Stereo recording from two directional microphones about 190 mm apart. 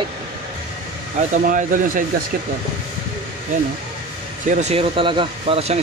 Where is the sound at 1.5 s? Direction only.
45° right (ahead or behind).